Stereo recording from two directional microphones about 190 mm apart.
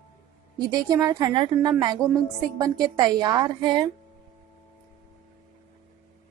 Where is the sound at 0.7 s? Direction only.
20° right (ahead or behind).